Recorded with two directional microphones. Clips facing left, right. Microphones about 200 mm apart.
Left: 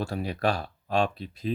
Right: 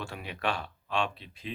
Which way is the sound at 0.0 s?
40° left (ahead or behind).